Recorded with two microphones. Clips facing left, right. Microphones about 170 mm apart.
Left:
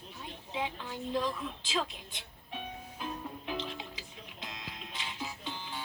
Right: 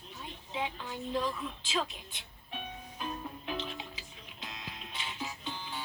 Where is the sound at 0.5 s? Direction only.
5° right (ahead or behind).